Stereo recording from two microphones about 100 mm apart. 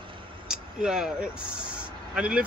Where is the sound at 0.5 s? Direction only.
10° right (ahead or behind).